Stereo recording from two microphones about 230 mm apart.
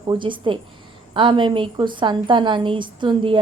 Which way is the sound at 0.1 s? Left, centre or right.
Right.